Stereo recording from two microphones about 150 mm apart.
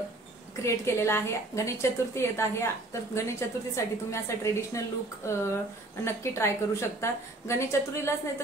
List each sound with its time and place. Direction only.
0.6 s a woman's voice: 20° left (ahead or behind)